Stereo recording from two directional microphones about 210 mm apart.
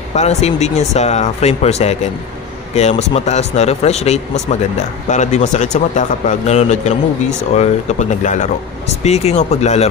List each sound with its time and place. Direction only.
0.1 s a man's voice: 30° left (ahead or behind)